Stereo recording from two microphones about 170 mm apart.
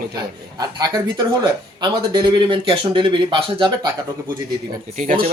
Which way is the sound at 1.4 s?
25° right (ahead or behind).